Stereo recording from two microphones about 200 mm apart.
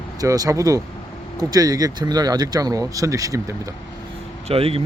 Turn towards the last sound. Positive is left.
turn(degrees=-30)  # may be behind; listen again after turning